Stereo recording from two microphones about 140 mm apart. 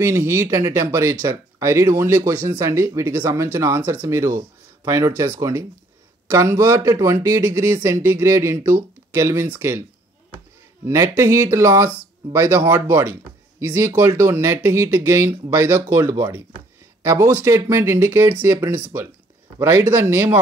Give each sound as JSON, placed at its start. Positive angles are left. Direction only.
{"t": 0.0, "sound": "speech", "side_deg": -20}
{"t": 10.9, "sound": "speech", "side_deg": -20}